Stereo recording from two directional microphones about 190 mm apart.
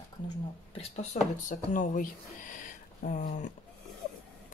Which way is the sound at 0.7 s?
30° left (ahead or behind).